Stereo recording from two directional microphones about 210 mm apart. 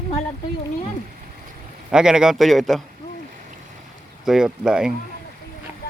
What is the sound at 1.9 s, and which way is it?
Speech, 5° right (ahead or behind).